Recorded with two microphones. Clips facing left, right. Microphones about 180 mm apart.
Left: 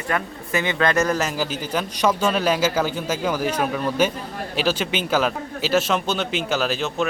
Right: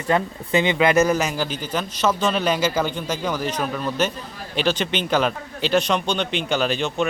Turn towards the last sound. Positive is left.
turn(degrees=0)  # may be behind; listen again after turning